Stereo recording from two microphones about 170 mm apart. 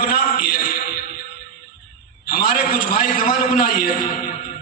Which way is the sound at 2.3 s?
55° left (ahead or behind).